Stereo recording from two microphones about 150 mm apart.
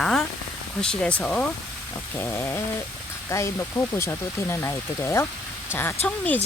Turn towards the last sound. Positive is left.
turn(degrees=15)  # may be behind; listen again after turning